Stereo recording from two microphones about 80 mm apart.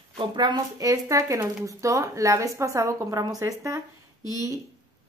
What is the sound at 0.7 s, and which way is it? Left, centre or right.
Speech, right.